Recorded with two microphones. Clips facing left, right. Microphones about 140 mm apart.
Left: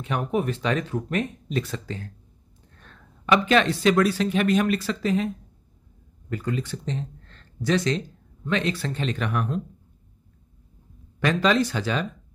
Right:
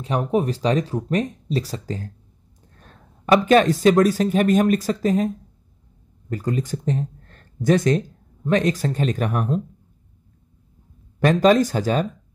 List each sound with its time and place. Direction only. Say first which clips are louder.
0.0 s speech: right 4 dB; 35° right (ahead or behind)
6.3 s speech: right 4 dB; 40° right (ahead or behind)
11.2 s speech: right 6 dB; 45° right (ahead or behind)